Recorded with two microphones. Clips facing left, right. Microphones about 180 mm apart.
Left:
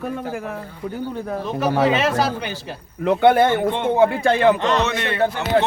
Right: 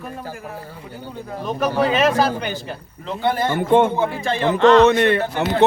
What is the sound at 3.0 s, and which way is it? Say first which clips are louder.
Speech: left 7 dB; 65° left (ahead or behind).